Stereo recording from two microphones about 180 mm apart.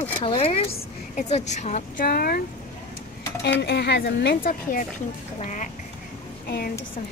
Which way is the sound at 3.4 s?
70° left (ahead or behind).